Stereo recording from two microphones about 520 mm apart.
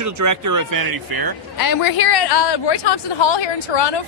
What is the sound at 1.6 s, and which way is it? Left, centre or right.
Speech, left.